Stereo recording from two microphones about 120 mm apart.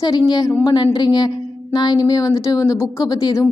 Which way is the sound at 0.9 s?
35° left (ahead or behind).